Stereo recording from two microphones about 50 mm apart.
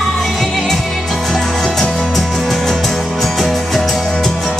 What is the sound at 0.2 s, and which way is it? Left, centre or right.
Music, centre.